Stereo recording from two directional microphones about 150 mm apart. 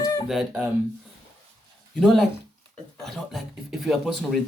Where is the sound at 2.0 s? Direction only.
Centre (ahead or behind).